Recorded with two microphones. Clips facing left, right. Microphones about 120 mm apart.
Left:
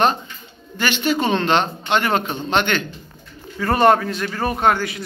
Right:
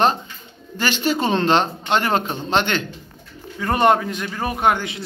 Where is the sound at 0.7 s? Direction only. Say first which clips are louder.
Left 1 dB; 35° right (ahead or behind).